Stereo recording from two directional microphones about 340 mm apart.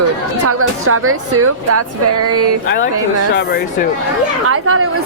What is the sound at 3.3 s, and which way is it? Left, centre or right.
Speech, left.